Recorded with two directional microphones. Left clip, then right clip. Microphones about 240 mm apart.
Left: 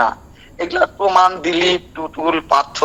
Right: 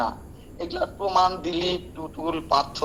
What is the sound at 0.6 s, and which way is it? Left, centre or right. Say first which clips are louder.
A man's voice: left 11 dB; left.